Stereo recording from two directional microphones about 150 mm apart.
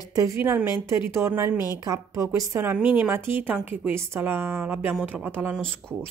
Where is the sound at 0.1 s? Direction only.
20° right (ahead or behind).